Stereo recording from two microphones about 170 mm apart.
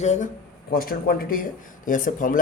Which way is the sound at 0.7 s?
60° left (ahead or behind).